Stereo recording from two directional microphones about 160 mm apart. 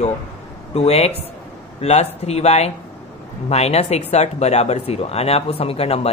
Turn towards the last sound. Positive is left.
turn(degrees=40)  # may be behind; listen again after turning